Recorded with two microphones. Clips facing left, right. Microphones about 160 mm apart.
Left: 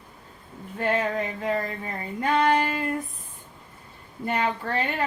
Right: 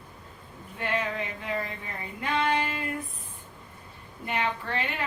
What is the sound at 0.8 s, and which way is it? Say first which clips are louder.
Female singing: left 5 dB; 40° left (ahead or behind).